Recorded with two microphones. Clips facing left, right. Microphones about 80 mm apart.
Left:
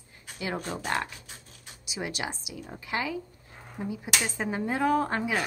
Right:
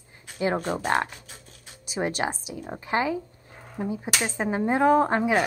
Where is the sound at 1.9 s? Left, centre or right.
Right.